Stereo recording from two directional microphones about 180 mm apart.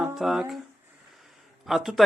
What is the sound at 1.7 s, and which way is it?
Speech, centre (ahead or behind).